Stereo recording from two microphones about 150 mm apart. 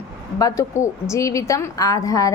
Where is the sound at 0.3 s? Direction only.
20° left (ahead or behind).